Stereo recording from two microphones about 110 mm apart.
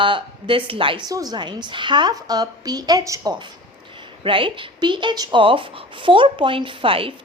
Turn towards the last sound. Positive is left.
turn(degrees=-55)  # may be behind; listen again after turning